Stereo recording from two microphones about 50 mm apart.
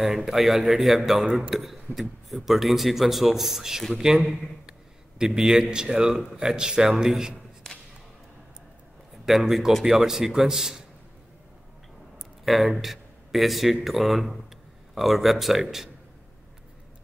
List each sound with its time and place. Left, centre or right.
0.0 s a man's voice: centre
9.4 s speech: centre
12.4 s a man's voice: centre